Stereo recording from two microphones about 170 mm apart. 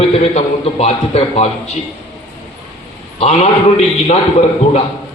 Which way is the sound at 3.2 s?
40° left (ahead or behind).